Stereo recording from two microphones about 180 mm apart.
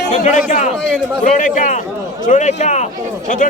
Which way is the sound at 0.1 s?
40° left (ahead or behind).